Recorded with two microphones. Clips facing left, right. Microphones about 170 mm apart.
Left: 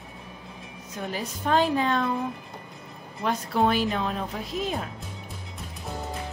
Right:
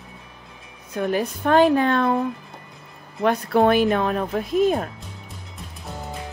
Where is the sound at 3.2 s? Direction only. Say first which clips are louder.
Right 6 dB; 60° right (ahead or behind).